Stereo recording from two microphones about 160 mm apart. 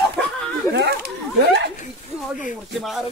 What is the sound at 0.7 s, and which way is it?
Speech, 90° right.